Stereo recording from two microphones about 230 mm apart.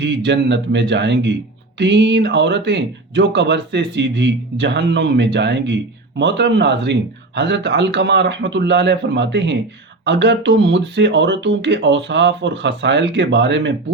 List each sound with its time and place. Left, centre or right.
0.0 s speech: right